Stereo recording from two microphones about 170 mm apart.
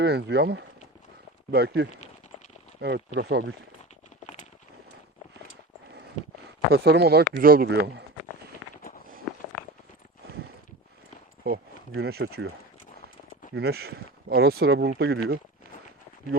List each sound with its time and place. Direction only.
0.0 s speech: 75° right (ahead or behind)
6.7 s speech: 70° right (ahead or behind)
11.4 s speech: 70° right (ahead or behind)
13.5 s speech: 70° right (ahead or behind)